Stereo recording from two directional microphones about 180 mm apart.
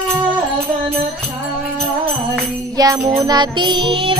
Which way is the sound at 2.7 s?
20° right (ahead or behind).